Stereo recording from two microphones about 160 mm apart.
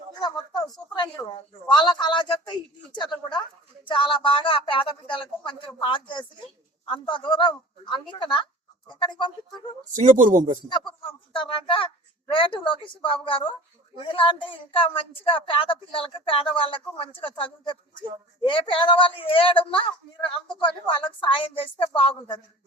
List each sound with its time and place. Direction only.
0.2 s a woman's voice: 25° left (ahead or behind)
9.9 s speech: 50° right (ahead or behind)
10.7 s speech: 30° left (ahead or behind)